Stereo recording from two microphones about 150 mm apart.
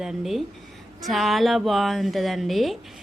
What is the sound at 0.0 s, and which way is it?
A woman's voice, centre (ahead or behind).